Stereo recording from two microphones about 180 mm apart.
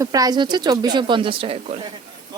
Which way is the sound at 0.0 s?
20° right (ahead or behind).